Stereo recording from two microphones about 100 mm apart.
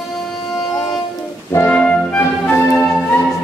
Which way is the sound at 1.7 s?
15° left (ahead or behind).